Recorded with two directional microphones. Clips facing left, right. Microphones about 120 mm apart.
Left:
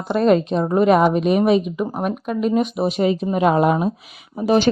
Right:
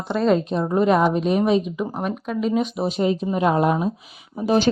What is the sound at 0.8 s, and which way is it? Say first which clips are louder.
Speech: left 3 dB; 70° left (ahead or behind).